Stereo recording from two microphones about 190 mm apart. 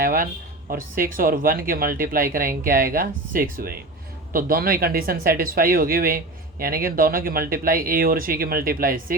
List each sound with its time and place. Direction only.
0.0 s speech: 50° right (ahead or behind)